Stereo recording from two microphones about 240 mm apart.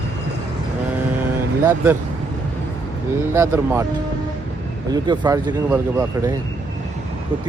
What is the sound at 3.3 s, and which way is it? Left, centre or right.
Speech, centre.